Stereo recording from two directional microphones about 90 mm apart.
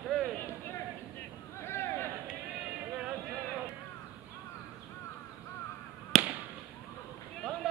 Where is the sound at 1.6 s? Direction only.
25° left (ahead or behind).